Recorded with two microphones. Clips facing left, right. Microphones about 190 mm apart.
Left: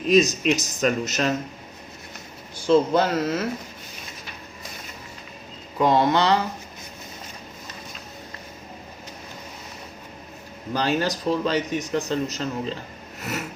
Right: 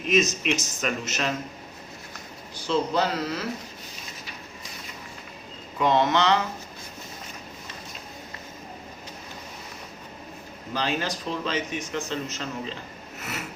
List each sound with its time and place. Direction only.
0.1 s a man's voice: 35° left (ahead or behind)
2.6 s speech: 45° left (ahead or behind)
5.8 s a man's voice: 40° left (ahead or behind)
10.8 s a man's voice: 40° left (ahead or behind)